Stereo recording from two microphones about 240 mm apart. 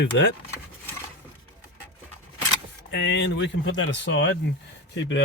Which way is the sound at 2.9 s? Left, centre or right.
Left.